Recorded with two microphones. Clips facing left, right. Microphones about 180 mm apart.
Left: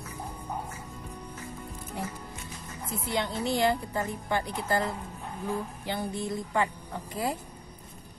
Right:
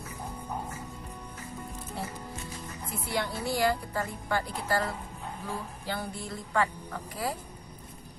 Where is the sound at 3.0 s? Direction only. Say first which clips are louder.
Left 2 dB; 20° left (ahead or behind).